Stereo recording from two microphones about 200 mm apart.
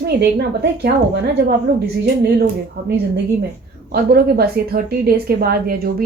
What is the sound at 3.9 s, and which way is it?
A woman's voice, 50° right (ahead or behind).